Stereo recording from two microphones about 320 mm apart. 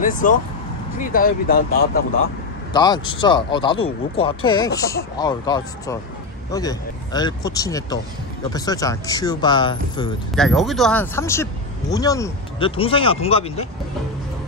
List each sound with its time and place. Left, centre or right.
0.0 s speech: left
2.7 s speech: centre
10.3 s speech: centre